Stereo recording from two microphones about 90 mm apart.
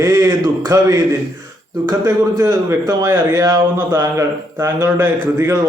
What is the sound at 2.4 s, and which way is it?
A man's voice, 35° right (ahead or behind).